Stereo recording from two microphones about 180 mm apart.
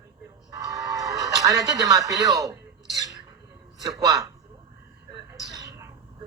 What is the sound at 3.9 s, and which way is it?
Speech, 20° right (ahead or behind).